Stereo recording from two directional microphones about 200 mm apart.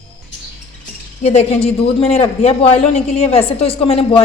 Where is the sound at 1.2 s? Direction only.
30° left (ahead or behind).